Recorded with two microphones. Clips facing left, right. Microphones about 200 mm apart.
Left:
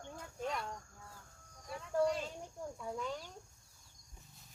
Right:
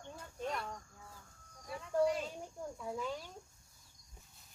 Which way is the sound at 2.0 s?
Centre (ahead or behind).